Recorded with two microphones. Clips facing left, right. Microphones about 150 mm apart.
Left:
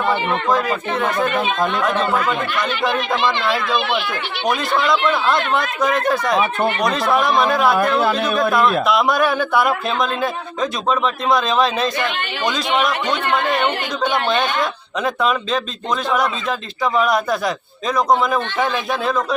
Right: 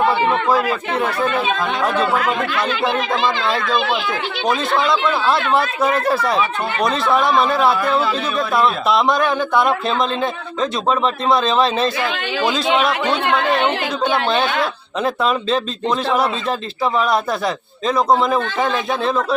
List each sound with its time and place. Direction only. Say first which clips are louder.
5.5 s speech: right 2 dB; 30° right (ahead or behind)
6.7 s speech: right 4 dB; centre (ahead or behind)
9.3 s speech: right 1 dB; 20° right (ahead or behind)
11.4 s speech: right 1 dB; centre (ahead or behind)
14.3 s speech: right 1 dB; 5° right (ahead or behind)
16.0 s speech: even; 30° right (ahead or behind)
18.3 s speech: right 1 dB; centre (ahead or behind)